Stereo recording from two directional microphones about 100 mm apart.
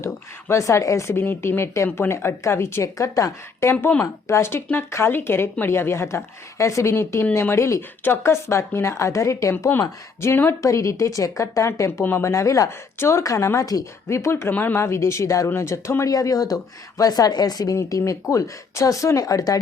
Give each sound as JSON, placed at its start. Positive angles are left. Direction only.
{"t": 0.0, "sound": "speech", "side_deg": 30}